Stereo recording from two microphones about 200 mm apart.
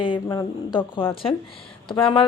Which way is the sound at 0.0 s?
20° left (ahead or behind).